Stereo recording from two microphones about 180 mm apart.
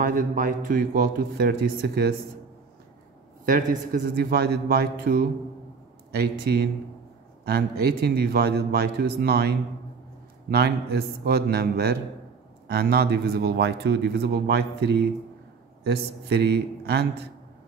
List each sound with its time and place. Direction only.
0.0 s a man's voice: 50° right (ahead or behind)
3.4 s speech: 50° right (ahead or behind); by 17.1 s 65° right (ahead or behind)